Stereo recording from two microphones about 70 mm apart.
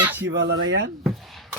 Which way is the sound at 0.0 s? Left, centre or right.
Right.